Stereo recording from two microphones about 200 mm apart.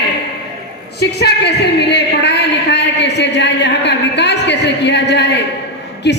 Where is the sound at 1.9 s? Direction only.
60° left (ahead or behind).